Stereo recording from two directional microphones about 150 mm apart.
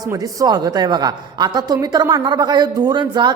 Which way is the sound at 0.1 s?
25° right (ahead or behind).